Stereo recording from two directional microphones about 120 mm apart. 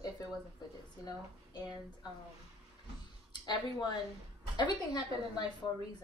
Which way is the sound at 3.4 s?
35° left (ahead or behind).